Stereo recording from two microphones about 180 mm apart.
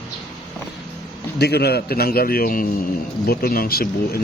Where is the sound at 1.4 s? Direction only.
65° left (ahead or behind).